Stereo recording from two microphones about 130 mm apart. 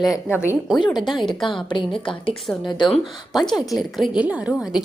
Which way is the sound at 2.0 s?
40° left (ahead or behind).